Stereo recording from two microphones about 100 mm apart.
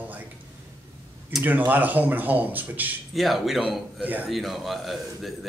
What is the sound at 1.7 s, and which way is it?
Speech, 15° right (ahead or behind).